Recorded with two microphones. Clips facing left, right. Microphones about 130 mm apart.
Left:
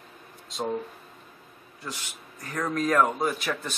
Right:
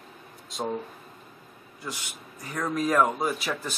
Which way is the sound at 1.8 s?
5° right (ahead or behind).